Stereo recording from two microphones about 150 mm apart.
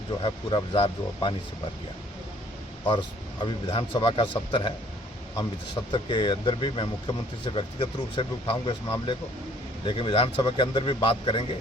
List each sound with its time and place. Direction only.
0.2 s speech: 30° left (ahead or behind)
3.4 s speech: 35° left (ahead or behind)